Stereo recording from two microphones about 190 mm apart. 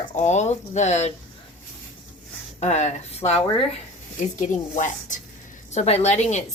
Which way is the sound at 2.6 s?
35° left (ahead or behind).